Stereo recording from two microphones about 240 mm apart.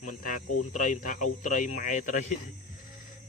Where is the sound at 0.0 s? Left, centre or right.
Left.